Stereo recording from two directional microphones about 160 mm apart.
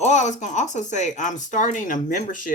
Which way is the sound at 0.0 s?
50° left (ahead or behind).